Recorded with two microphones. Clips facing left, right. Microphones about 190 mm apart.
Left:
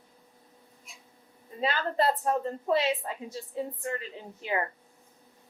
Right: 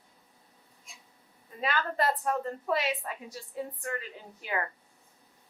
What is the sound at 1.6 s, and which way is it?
A woman's voice, 30° left (ahead or behind).